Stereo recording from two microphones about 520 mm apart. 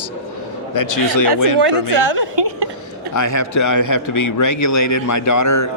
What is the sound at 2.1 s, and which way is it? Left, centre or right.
Speech, right.